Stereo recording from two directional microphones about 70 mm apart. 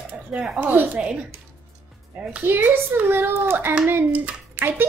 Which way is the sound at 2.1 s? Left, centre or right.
Right.